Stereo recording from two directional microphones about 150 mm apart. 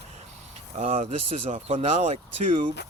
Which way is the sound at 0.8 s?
45° right (ahead or behind).